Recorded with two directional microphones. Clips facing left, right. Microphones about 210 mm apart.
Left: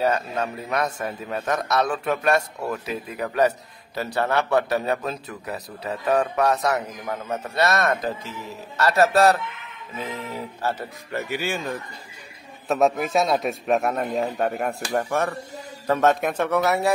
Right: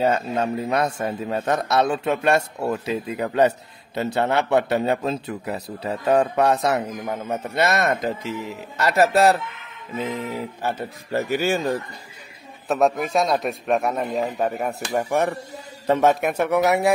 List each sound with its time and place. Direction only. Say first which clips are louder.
0.0 s a man's voice: right 2 dB; 25° right (ahead or behind)
10.3 s speech: right 1 dB; 15° right (ahead or behind)
11.1 s speech: right 6 dB; 40° right (ahead or behind)
12.6 s a man's voice: even; centre (ahead or behind)
15.0 s speech: right 3 dB; 15° right (ahead or behind)